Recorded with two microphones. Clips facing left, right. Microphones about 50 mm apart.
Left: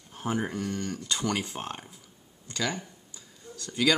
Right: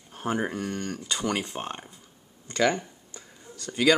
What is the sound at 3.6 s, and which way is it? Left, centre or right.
Speech, centre.